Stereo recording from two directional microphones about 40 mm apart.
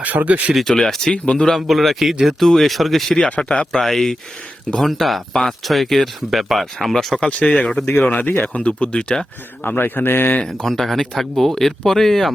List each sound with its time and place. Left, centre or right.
0.0 s speech: right
0.6 s speech: centre
1.1 s speech: left
1.5 s speech: centre
7.3 s speech: left
7.5 s speech: centre
8.0 s speech: left
9.6 s speech: left
10.7 s speech: centre